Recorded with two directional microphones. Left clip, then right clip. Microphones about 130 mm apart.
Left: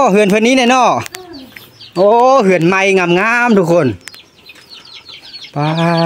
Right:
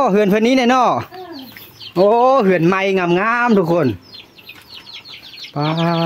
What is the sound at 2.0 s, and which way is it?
Speech, centre (ahead or behind).